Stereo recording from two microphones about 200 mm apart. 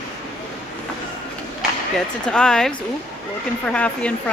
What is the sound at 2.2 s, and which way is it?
Speech, 5° left (ahead or behind).